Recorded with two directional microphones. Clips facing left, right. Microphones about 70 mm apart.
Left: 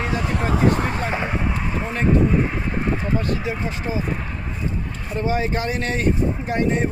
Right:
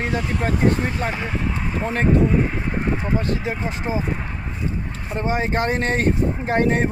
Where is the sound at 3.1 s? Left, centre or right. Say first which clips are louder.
Even; right.